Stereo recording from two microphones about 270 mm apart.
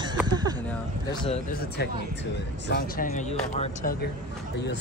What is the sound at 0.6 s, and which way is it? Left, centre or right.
Speech, centre.